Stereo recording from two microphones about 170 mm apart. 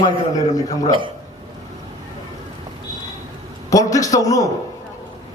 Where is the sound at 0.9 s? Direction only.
30° right (ahead or behind).